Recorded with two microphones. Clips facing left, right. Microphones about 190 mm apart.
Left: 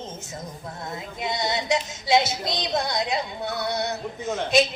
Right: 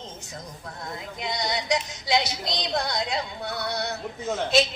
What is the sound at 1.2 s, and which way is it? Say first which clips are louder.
A man's voice: left 3 dB; 25° left (ahead or behind).